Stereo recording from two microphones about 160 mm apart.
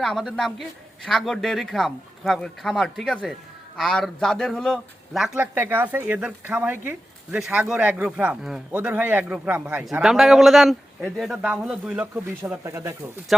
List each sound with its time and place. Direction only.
0.0 s a man's voice: centre (ahead or behind); by 13.0 s 15° right (ahead or behind)